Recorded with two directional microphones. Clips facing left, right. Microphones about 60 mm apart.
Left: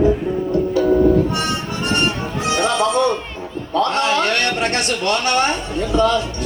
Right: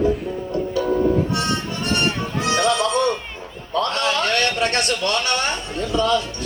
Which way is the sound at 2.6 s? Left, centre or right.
Left.